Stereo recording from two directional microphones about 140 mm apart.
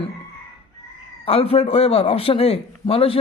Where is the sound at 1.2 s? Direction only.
45° left (ahead or behind).